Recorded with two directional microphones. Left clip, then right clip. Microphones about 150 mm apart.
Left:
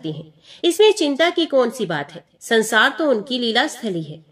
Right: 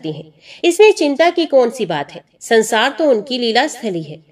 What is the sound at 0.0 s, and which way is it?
A woman's voice, 20° right (ahead or behind).